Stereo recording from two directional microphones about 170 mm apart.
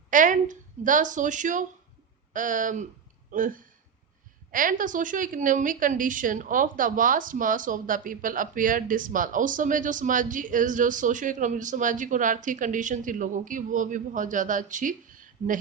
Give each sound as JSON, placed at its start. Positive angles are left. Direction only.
{"t": 0.1, "sound": "a woman's voice", "side_deg": -50}